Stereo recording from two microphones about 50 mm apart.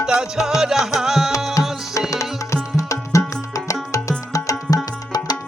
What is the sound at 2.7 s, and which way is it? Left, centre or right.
Music, left.